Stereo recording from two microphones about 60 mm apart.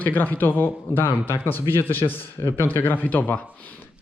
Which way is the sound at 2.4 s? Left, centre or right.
Left.